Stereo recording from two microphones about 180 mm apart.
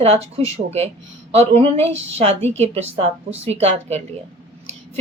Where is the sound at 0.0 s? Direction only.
35° right (ahead or behind).